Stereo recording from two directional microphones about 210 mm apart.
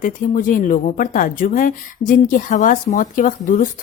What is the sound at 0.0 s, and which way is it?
A woman's voice, 40° left (ahead or behind).